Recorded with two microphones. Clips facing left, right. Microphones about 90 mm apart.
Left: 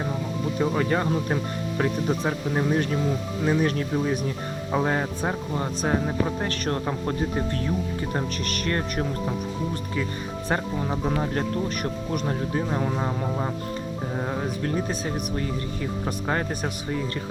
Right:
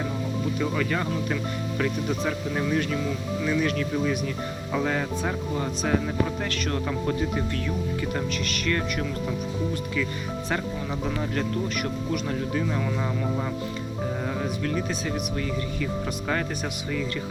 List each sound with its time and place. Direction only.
0.6 s speech: 35° left (ahead or behind)
10.5 s speech: 35° left (ahead or behind)